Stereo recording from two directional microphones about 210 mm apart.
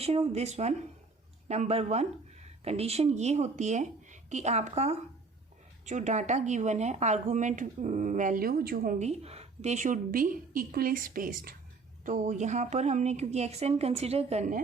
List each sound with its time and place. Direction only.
0.0 s speech: 30° right (ahead or behind)